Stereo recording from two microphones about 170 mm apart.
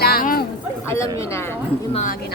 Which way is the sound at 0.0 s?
60° left (ahead or behind).